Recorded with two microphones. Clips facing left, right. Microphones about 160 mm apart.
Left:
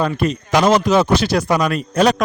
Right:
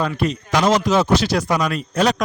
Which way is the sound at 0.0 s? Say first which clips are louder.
Left 3 dB; 50° left (ahead or behind).